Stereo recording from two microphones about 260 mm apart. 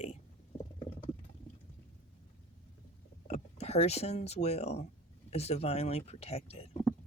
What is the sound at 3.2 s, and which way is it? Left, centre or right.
Speech, left.